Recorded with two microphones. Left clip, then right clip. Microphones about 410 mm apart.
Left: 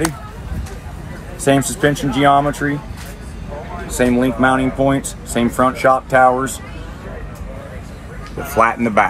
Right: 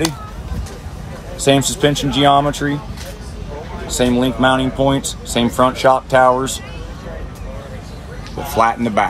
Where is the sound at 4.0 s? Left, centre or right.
Centre.